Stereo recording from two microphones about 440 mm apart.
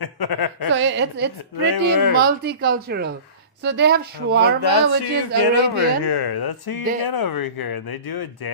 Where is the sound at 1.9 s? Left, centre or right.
Left.